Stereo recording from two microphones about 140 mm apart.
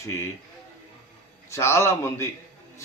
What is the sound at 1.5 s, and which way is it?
Speech, 20° left (ahead or behind).